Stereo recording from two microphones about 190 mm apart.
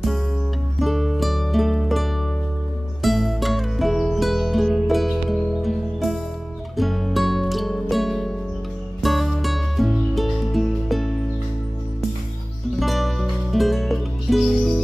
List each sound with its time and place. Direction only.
0.7 s music: centre (ahead or behind)
12.7 s music: centre (ahead or behind)